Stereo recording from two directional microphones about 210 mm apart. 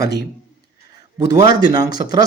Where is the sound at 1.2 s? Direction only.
20° right (ahead or behind).